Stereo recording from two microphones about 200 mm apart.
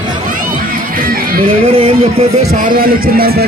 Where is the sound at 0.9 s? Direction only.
45° right (ahead or behind).